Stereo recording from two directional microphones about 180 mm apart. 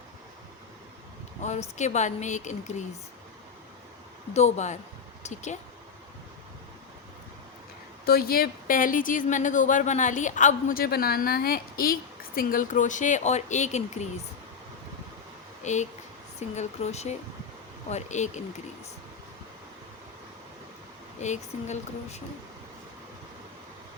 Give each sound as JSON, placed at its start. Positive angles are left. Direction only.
{"t": 1.4, "sound": "speech", "side_deg": 40}
{"t": 4.4, "sound": "speech", "side_deg": 40}
{"t": 8.0, "sound": "speech", "side_deg": 55}
{"t": 15.6, "sound": "speech", "side_deg": 40}
{"t": 21.2, "sound": "speech", "side_deg": 40}